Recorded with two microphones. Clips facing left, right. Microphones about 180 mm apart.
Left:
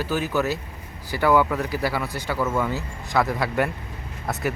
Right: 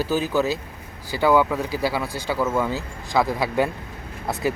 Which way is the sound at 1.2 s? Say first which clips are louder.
Right 1 dB; 10° right (ahead or behind).